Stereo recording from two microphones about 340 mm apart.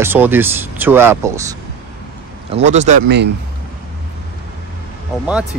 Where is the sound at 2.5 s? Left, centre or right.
Right.